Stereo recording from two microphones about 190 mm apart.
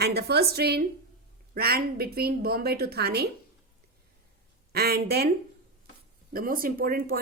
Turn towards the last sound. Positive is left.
turn(degrees=-50)  # may be behind; listen again after turning